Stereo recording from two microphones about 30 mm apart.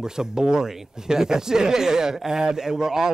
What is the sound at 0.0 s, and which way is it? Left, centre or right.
Speech, right.